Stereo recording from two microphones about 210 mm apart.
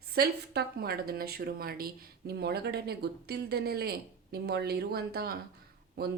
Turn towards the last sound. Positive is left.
turn(degrees=-50)  # may be behind; listen again after turning